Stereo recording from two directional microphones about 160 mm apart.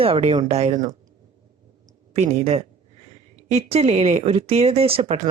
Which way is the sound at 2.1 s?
45° right (ahead or behind).